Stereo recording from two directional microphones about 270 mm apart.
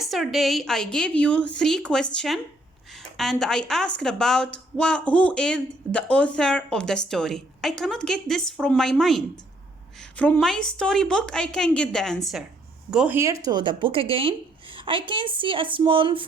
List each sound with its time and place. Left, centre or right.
0.0 s a woman's voice: centre